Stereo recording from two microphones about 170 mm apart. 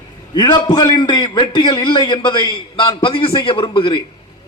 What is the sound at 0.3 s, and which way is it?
A man's voice, 25° left (ahead or behind).